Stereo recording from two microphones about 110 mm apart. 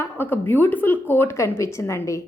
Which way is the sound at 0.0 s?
20° left (ahead or behind).